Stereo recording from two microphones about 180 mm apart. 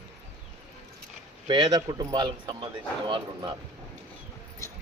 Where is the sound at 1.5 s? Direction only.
25° right (ahead or behind).